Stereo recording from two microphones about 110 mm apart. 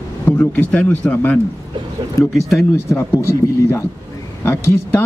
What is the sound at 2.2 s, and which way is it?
Speech, 35° left (ahead or behind).